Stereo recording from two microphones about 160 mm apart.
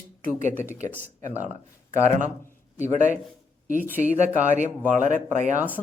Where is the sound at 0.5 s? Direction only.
10° right (ahead or behind).